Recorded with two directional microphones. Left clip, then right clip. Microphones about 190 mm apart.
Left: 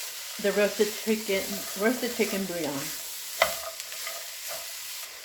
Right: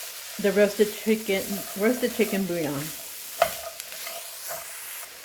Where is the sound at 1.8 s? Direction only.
55° right (ahead or behind).